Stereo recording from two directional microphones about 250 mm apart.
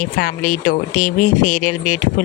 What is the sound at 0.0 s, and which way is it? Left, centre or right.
Speech, left.